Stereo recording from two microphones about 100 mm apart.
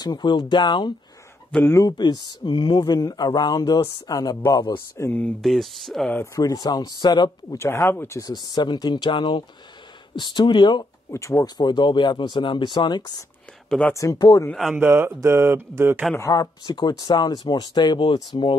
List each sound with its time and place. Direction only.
0.0 s speech: 50° left (ahead or behind)
1.6 s speech: 30° left (ahead or behind)
1.9 s speech: 50° left (ahead or behind)
4.7 s speech: 25° left (ahead or behind)
5.4 s speech: centre (ahead or behind)
6.3 s speech: 40° left (ahead or behind)
7.5 s speech: 25° left (ahead or behind)
8.2 s speech: 45° left (ahead or behind)
11.1 s speech: 30° left (ahead or behind)
13.7 s speech: 10° left (ahead or behind)
14.1 s speech: 45° left (ahead or behind)
14.5 s speech: centre (ahead or behind)
14.9 s speech: 25° right (ahead or behind)
16.2 s speech: 35° left (ahead or behind)